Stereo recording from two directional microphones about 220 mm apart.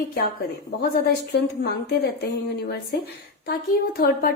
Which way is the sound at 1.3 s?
50° left (ahead or behind).